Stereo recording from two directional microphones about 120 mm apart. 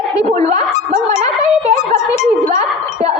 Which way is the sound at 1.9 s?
70° left (ahead or behind).